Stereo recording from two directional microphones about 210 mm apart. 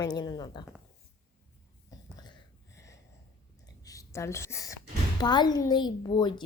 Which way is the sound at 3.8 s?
15° left (ahead or behind).